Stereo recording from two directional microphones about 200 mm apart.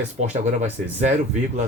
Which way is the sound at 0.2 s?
35° right (ahead or behind).